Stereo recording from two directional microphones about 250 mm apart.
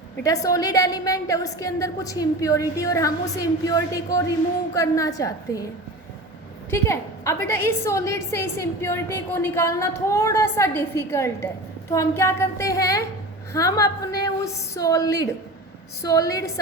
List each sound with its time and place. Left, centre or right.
0.2 s a woman's voice: centre
6.7 s a woman's voice: centre